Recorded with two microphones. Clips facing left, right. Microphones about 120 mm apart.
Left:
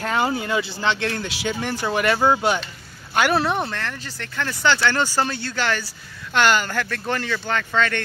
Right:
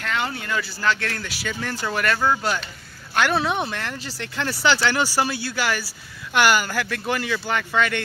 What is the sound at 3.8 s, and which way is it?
Speech, 15° right (ahead or behind).